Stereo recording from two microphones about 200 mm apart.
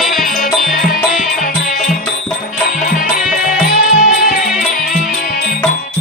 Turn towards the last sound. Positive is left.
turn(degrees=40)  # may be behind; listen again after turning